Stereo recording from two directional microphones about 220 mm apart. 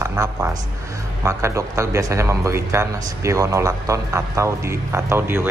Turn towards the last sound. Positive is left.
turn(degrees=-10)  # may be behind; listen again after turning